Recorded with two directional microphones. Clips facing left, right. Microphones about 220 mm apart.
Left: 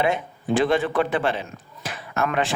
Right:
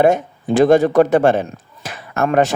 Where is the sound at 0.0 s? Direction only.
45° right (ahead or behind).